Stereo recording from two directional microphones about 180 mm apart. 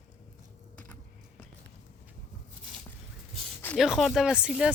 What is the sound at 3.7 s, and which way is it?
Speech, centre (ahead or behind).